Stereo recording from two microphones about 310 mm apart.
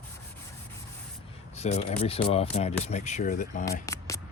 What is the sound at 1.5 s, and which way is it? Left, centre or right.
Speech, centre.